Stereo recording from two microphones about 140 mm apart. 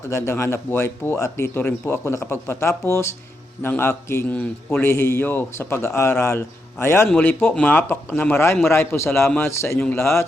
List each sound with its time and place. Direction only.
0.1 s a man's voice: 20° left (ahead or behind)